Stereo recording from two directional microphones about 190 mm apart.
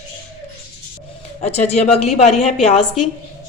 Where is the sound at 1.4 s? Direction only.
35° left (ahead or behind).